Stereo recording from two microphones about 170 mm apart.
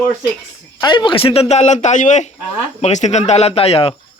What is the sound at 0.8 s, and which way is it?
Speech, 25° left (ahead or behind).